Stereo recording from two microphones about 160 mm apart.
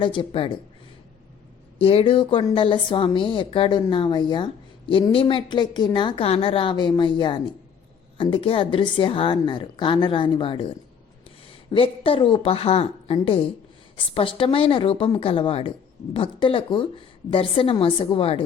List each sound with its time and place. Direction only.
0.0 s speech: 30° left (ahead or behind)
1.8 s speech: 35° left (ahead or behind)